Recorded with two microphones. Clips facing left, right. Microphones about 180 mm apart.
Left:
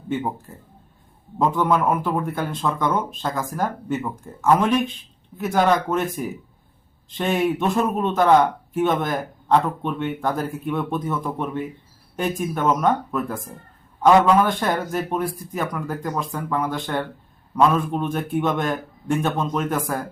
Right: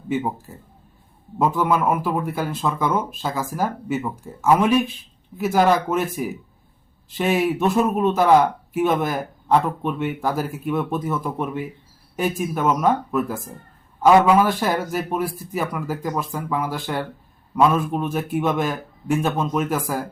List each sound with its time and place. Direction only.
0.1 s speech: 5° right (ahead or behind)
7.1 s a man's voice: 5° right (ahead or behind)